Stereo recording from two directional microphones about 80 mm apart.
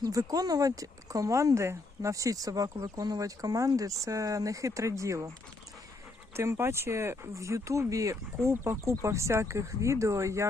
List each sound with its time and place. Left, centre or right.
0.0 s speech: right
6.3 s speech: right